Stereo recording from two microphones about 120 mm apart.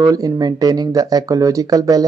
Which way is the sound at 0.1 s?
35° right (ahead or behind).